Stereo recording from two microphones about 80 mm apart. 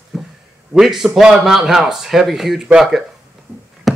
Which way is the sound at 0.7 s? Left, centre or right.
Centre.